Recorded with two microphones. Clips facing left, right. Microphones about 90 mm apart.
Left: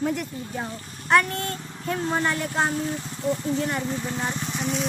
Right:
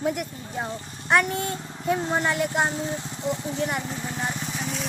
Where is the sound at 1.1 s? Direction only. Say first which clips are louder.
Left 1 dB; 10° right (ahead or behind).